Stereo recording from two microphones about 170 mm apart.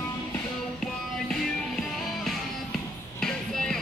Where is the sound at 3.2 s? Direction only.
5° left (ahead or behind).